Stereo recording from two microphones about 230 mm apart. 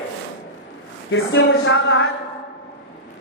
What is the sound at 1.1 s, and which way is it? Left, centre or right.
Speech, left.